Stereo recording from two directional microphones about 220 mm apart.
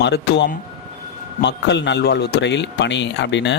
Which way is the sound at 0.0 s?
50° left (ahead or behind).